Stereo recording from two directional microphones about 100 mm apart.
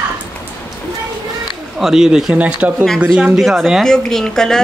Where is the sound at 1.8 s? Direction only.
5° right (ahead or behind).